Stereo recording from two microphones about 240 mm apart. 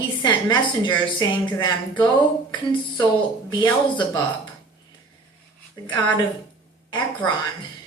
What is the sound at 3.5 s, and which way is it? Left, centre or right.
Speech, centre.